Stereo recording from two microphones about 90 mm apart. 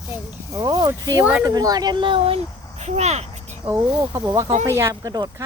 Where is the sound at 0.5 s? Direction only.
40° right (ahead or behind); by 2.4 s 80° right.